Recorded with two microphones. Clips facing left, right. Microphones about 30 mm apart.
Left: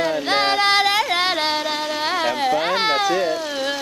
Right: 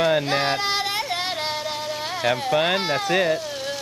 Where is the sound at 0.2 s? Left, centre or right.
Left.